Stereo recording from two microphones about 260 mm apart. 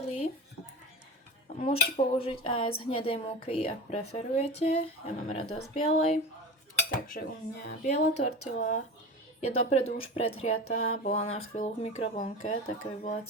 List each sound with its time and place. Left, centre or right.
0.0 s a sound: left
1.5 s cutlery: left
7.2 s speech: left
7.9 s cutlery: left